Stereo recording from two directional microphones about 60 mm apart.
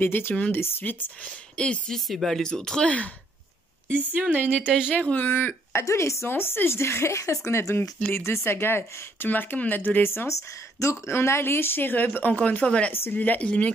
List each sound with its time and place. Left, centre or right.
0.0 s speech: left
1.6 s speech: centre
2.0 s speech: centre
3.9 s speech: right
4.5 s speech: centre
4.9 s speech: left
6.2 s a woman's voice: left
10.8 s speech: left
12.4 s speech: left
12.9 s speech: left
13.2 s speech: left